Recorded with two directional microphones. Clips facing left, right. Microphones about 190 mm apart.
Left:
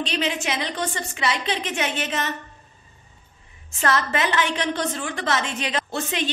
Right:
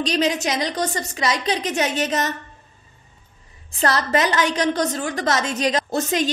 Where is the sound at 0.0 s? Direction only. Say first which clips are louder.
Right 5 dB; 40° right (ahead or behind).